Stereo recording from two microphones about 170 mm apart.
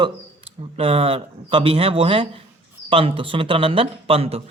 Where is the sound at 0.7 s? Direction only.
35° right (ahead or behind).